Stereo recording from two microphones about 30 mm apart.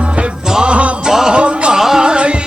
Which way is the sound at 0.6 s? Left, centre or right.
Right.